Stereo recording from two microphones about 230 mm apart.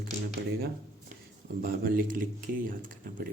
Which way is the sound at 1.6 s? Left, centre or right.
Right.